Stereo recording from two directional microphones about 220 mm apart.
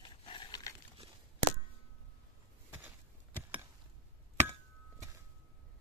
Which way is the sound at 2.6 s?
10° right (ahead or behind).